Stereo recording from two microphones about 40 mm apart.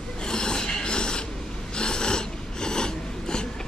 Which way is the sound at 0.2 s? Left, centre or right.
Centre.